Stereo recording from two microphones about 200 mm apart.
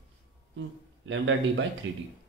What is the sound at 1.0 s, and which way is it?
Speech, 70° right (ahead or behind).